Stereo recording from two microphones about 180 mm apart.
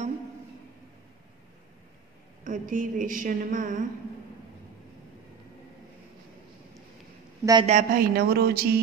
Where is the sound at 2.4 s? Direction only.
45° right (ahead or behind).